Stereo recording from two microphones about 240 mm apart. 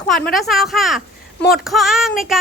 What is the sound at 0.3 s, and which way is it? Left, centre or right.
Speech, centre.